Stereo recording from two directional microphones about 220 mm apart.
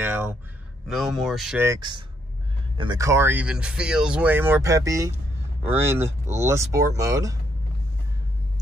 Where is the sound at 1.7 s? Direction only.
20° right (ahead or behind).